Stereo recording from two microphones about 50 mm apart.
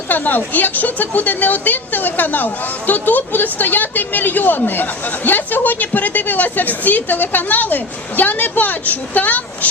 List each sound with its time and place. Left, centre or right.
0.1 s speech: left